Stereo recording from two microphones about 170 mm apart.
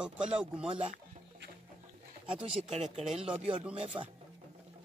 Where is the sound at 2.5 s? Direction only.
40° right (ahead or behind).